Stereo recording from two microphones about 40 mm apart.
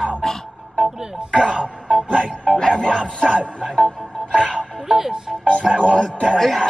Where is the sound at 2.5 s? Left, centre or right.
Centre.